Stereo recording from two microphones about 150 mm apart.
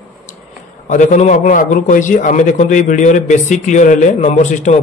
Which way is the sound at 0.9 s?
55° left (ahead or behind).